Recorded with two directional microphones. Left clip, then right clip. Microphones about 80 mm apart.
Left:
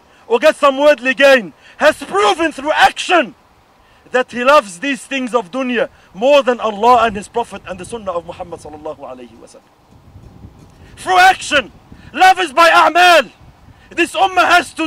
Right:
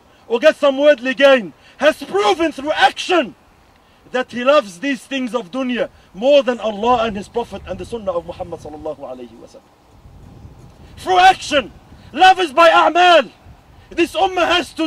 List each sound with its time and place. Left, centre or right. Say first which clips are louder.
0.3 s a man's voice: left 2 dB; left
11.0 s a man's voice: left 1 dB; left